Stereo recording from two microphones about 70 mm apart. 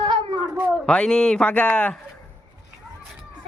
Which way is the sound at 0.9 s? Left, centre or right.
Centre.